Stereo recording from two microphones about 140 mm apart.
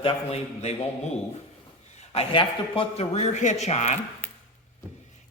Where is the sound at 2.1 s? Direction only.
40° left (ahead or behind).